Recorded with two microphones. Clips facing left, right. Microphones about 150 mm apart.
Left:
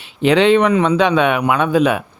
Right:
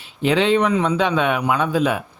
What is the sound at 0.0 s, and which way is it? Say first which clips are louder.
A man's voice: left 5 dB; 75° left (ahead or behind).